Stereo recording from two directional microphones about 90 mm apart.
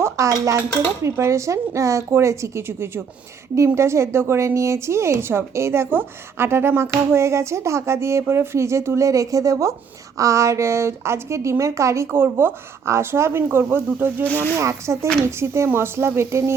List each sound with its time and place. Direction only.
0.0 s speech: 35° right (ahead or behind)